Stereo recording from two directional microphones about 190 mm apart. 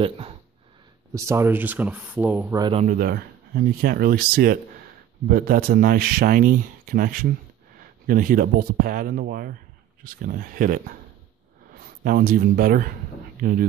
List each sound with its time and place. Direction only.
1.1 s speech: 15° right (ahead or behind)
2.6 s speech: 30° right (ahead or behind)
2.9 s speech: 55° right (ahead or behind)